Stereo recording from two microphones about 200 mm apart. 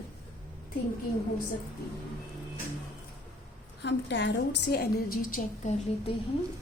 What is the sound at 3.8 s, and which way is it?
A woman's voice, 65° left (ahead or behind).